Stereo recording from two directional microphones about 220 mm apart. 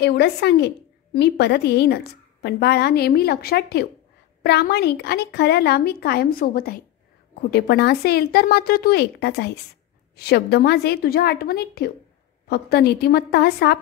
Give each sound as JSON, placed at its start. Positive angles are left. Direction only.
{"t": 0.0, "sound": "a woman's voice", "side_deg": 50}